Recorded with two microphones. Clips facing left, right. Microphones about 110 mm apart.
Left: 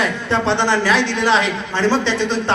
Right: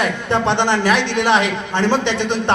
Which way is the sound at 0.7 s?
60° right (ahead or behind).